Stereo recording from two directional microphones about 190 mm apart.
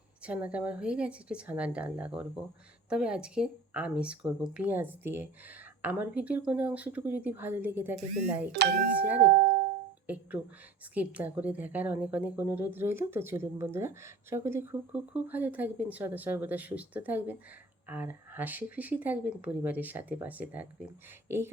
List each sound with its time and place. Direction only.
0.3 s a woman's voice: 5° right (ahead or behind)
9.3 s music: 45° right (ahead or behind)
10.9 s a woman's voice: 10° right (ahead or behind)